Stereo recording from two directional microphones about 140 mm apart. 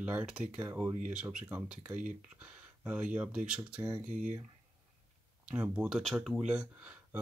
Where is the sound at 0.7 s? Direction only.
20° right (ahead or behind).